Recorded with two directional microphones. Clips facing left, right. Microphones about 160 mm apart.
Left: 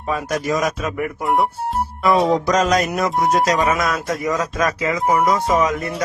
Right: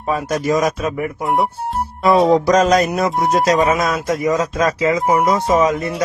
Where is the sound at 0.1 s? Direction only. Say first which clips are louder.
Right 3 dB; 35° right (ahead or behind).